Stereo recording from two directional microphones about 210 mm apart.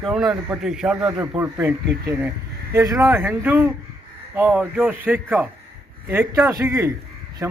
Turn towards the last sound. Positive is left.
turn(degrees=-15)  # may be behind; listen again after turning